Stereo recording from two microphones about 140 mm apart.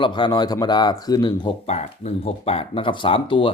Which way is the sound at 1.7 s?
50° left (ahead or behind).